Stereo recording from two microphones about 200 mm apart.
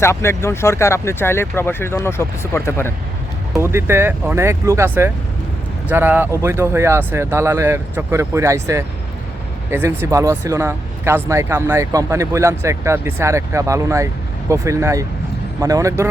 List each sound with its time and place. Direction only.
0.0 s speech: 15° left (ahead or behind)
3.5 s speech: 15° right (ahead or behind)